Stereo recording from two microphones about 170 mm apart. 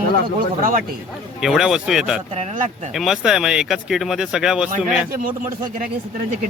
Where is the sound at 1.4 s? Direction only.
Centre (ahead or behind).